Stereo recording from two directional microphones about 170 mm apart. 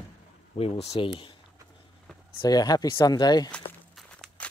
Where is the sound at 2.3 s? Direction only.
25° left (ahead or behind).